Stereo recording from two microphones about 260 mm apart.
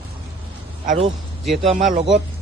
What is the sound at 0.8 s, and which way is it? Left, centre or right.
Speech, right.